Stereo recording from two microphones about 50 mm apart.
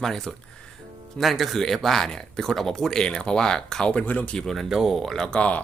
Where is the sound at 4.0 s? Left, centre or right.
Left.